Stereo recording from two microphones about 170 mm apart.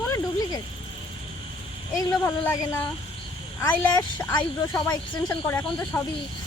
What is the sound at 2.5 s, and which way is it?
Speech, 20° left (ahead or behind).